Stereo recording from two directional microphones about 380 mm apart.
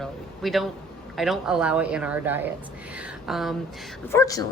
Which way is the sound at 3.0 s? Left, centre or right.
Centre.